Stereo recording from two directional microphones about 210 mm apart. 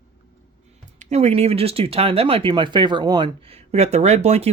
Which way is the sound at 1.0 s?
30° right (ahead or behind).